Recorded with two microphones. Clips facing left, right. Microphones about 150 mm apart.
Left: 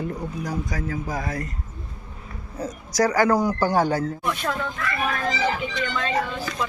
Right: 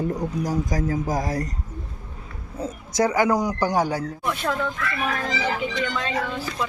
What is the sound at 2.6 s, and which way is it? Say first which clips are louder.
Speech: even; 25° right (ahead or behind).